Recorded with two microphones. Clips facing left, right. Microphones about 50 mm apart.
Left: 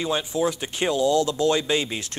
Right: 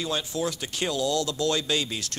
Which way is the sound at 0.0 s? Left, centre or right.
Left.